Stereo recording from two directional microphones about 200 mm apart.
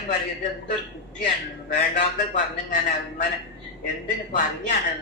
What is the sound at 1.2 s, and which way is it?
A man's voice, 40° left (ahead or behind).